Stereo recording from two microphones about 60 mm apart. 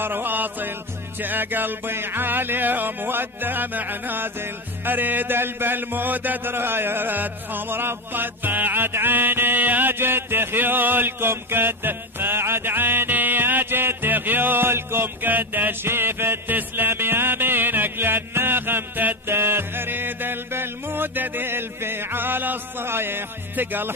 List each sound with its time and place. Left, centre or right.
0.0 s music: right